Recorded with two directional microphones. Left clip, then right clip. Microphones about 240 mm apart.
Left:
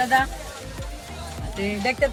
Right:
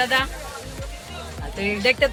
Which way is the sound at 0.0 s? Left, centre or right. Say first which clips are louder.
Left 1 dB; centre.